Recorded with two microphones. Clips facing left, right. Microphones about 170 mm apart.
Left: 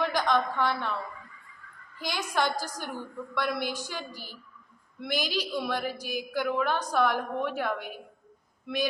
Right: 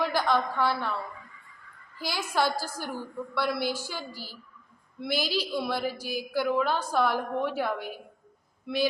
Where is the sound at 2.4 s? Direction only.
15° left (ahead or behind).